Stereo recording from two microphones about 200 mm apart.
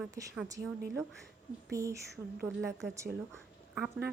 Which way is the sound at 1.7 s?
15° right (ahead or behind).